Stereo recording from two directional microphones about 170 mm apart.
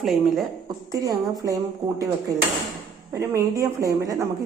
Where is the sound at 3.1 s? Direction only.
20° right (ahead or behind).